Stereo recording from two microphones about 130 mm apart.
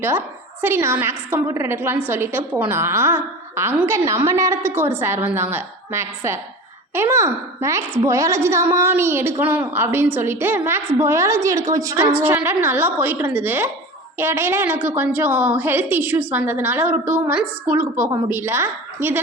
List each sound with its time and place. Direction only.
0.6 s a woman's voice: 20° right (ahead or behind)
12.1 s a woman's voice: 10° right (ahead or behind)